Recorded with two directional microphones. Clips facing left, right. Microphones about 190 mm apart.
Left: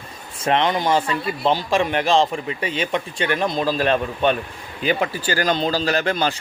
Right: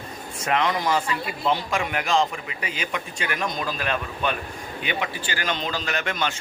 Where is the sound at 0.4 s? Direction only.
30° left (ahead or behind).